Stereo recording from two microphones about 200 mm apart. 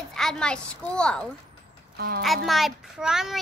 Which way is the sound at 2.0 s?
50° right (ahead or behind).